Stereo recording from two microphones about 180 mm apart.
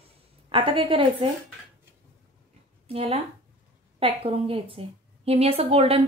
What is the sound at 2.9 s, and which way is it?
Speech, 30° right (ahead or behind).